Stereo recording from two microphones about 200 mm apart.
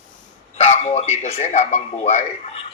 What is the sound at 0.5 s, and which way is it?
A man's voice, 30° left (ahead or behind).